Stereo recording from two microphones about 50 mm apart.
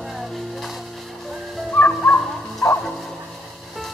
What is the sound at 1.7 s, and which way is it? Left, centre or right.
Music, left.